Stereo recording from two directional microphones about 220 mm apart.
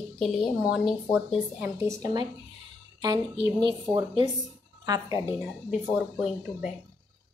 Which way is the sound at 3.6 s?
20° right (ahead or behind).